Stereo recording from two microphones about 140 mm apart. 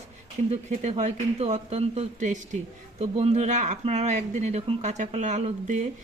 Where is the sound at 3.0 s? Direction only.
50° right (ahead or behind).